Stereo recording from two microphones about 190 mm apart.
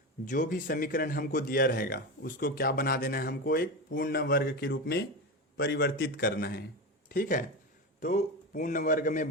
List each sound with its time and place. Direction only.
0.3 s a man's voice: 45° left (ahead or behind)